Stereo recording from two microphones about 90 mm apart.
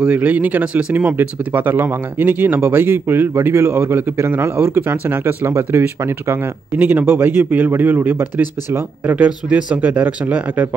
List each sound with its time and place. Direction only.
0.0 s speech: 15° right (ahead or behind)